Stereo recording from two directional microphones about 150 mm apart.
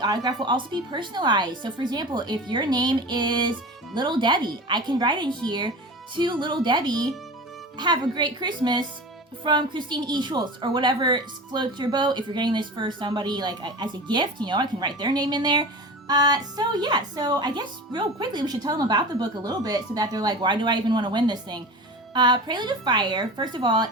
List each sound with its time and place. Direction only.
0.0 s a woman's voice: 25° right (ahead or behind)